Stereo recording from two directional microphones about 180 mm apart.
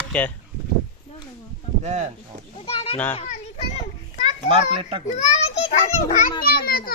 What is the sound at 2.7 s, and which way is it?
Speech, 30° left (ahead or behind).